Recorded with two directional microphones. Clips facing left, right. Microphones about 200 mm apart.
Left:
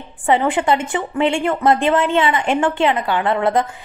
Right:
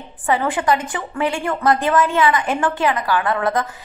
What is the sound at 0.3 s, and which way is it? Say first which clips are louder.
A woman's voice: left 2 dB; 20° left (ahead or behind).